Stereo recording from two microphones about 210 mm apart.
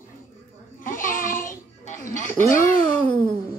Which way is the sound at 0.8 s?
40° left (ahead or behind).